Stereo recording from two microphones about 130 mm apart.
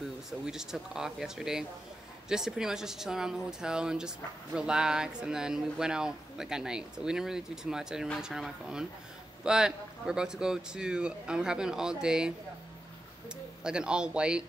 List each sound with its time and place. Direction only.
0.5 s speech: 5° right (ahead or behind)
13.7 s a man's voice: 5° right (ahead or behind)